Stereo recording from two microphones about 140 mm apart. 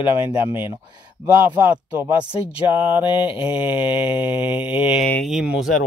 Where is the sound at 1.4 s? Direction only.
15° right (ahead or behind).